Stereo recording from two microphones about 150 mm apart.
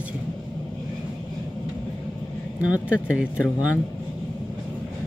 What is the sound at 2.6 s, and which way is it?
Speech, 10° right (ahead or behind).